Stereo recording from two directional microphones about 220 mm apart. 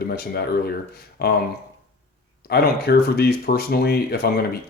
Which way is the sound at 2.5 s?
45° left (ahead or behind).